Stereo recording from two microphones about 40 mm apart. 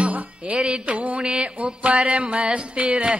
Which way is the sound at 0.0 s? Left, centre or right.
Right.